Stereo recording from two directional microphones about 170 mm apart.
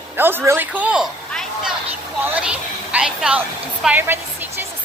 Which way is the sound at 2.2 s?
10° right (ahead or behind).